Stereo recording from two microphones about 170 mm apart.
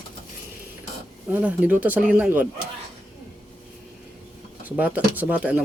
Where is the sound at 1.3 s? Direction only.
10° right (ahead or behind).